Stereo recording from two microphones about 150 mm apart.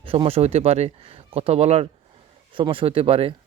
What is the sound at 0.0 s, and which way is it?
Speech, 35° right (ahead or behind).